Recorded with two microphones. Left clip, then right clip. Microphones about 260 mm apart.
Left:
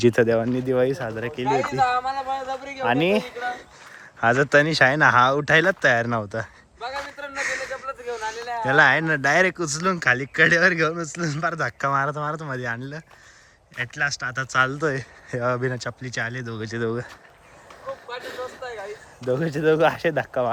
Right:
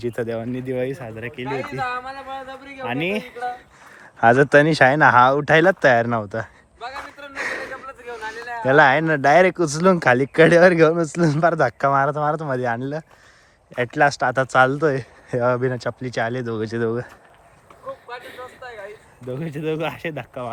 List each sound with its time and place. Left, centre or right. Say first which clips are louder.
0.0 s speech: left 8 dB; left
0.3 s speech: left 5 dB; centre
4.2 s speech: right 4 dB; centre
7.3 s a sound: even; centre
7.9 s a sound: left 3 dB; centre
8.6 s speech: right 3 dB; centre
18.2 s speech: left 4 dB; centre